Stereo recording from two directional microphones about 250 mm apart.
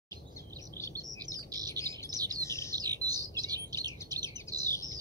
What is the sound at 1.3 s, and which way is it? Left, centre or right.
Chirp, centre.